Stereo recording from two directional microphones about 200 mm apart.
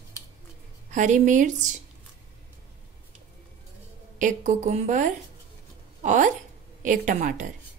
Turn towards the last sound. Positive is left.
turn(degrees=-40)  # may be behind; listen again after turning